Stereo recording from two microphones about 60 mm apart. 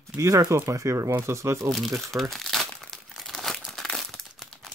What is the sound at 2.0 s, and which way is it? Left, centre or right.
Speech, centre.